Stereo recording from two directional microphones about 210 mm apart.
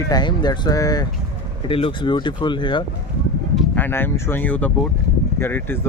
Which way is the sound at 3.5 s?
5° left (ahead or behind).